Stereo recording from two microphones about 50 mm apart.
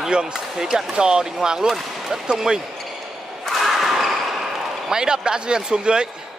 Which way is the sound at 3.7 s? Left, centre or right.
Centre.